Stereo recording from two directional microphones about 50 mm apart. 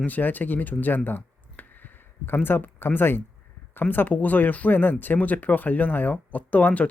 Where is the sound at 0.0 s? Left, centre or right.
Left.